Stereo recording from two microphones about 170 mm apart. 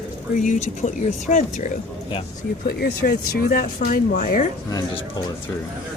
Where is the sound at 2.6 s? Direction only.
65° left (ahead or behind).